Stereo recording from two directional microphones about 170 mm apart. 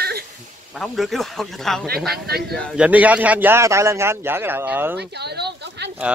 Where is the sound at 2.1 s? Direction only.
70° right (ahead or behind).